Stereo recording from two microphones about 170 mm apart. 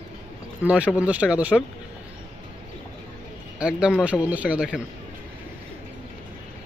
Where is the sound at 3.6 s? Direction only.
5° right (ahead or behind).